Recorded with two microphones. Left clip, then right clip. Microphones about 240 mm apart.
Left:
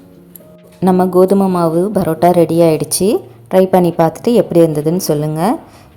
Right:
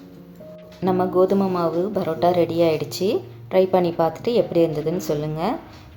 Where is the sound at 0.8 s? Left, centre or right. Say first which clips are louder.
Left 8 dB; left.